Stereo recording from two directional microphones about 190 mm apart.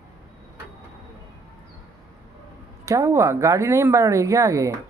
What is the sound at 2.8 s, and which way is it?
A woman's voice, 15° right (ahead or behind).